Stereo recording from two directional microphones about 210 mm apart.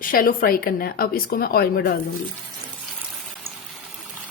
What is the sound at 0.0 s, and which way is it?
A woman's voice, 40° left (ahead or behind).